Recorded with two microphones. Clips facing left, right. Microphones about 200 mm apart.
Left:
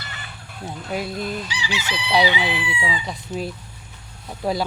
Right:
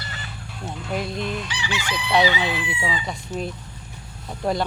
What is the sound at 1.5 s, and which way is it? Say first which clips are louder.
Chicken: even; 55° right (ahead or behind).